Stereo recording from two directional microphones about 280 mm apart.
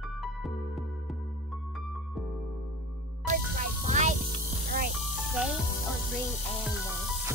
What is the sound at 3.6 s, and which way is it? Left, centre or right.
Music, right.